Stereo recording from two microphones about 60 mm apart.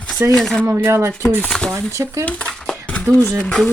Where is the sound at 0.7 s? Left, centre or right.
Right.